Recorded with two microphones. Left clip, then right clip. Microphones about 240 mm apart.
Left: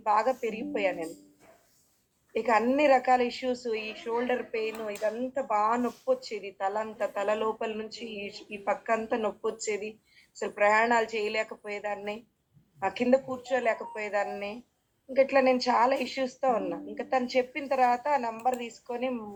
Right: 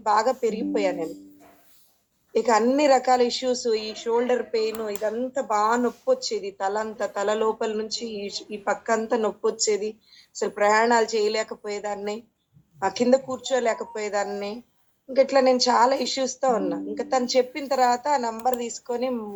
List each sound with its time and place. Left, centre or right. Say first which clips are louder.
0.0 s a woman's voice: right 5 dB; right
2.3 s a woman's voice: right 5 dB; right